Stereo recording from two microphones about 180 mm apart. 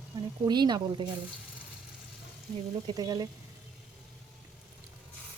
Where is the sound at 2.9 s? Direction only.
20° right (ahead or behind).